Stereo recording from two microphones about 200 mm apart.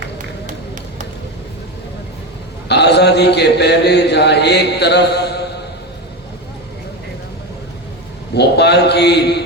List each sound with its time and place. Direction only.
2.6 s a man's voice: 55° left (ahead or behind)
8.4 s a man's voice: 55° left (ahead or behind)